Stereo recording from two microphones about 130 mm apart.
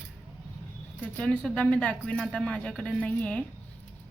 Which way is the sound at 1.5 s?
5° left (ahead or behind).